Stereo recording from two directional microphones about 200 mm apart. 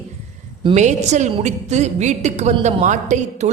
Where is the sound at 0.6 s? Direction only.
35° right (ahead or behind).